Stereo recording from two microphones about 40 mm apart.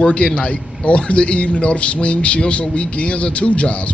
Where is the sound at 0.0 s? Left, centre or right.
Left.